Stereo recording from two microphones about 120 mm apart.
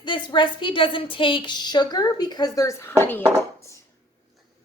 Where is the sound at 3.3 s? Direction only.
25° left (ahead or behind).